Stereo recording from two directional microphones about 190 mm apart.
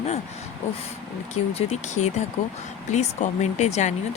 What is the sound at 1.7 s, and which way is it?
Speech, 35° left (ahead or behind).